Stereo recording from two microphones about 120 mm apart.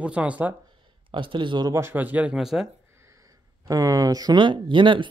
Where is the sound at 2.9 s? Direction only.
25° right (ahead or behind).